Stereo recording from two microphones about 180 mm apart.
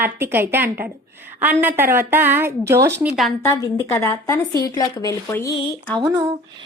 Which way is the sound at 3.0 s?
Centre (ahead or behind).